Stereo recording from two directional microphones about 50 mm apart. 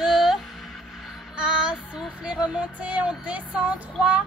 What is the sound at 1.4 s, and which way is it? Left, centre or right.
Child singing, centre.